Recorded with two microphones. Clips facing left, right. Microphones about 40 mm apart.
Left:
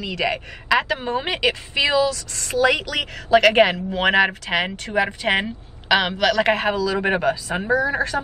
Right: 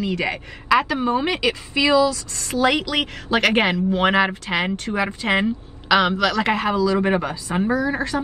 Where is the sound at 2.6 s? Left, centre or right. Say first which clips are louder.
Right 1 dB; right.